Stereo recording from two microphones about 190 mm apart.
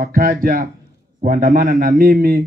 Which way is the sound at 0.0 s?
50° right (ahead or behind).